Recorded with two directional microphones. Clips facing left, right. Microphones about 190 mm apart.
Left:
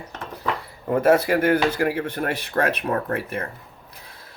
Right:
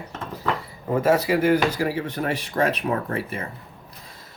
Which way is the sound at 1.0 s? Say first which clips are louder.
Left 1 dB; 55° left (ahead or behind).